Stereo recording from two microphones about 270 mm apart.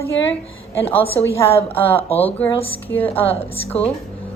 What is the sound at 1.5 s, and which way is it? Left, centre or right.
A woman's voice, left.